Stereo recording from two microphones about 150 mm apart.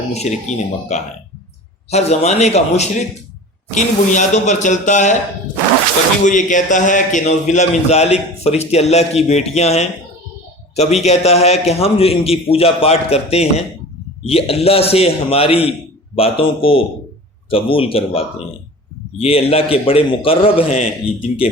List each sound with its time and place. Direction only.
0.1 s a man's voice: 50° left (ahead or behind)
6.2 s a man's voice: 55° left (ahead or behind); by 20.9 s 40° left (ahead or behind)